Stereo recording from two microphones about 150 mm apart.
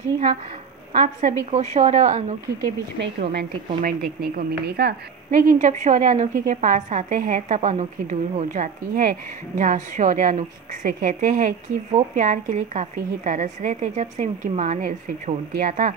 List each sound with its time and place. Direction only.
0.9 s speech: 60° right (ahead or behind)
3.2 s speech: 70° right (ahead or behind)
12.2 s speech: 55° right (ahead or behind)